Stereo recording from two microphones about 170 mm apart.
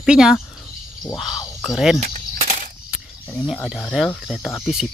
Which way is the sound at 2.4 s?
45° right (ahead or behind).